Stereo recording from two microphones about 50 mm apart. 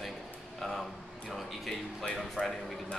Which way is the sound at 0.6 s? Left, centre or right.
Centre.